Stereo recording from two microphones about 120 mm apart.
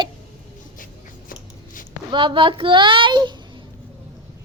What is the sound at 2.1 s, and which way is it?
Speech, 40° right (ahead or behind).